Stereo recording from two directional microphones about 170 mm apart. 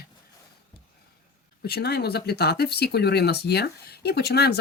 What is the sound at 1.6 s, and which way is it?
Speech, 70° left (ahead or behind).